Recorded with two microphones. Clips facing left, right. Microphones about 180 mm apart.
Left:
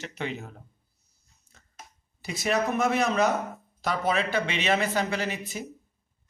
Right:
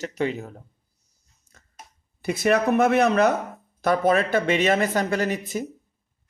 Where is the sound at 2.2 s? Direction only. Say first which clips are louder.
Right 6 dB; 55° right (ahead or behind).